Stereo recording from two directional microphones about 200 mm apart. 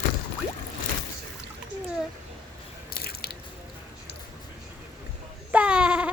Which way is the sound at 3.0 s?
50° left (ahead or behind).